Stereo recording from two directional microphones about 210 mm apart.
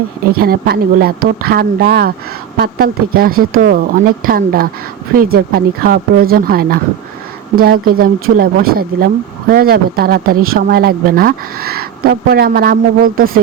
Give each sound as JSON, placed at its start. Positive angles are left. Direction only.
{"t": 0.3, "sound": "speech", "side_deg": -45}